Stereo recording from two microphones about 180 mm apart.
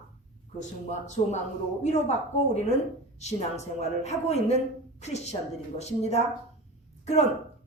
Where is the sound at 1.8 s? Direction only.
40° left (ahead or behind).